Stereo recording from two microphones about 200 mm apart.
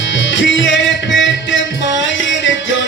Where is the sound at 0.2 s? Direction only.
65° left (ahead or behind).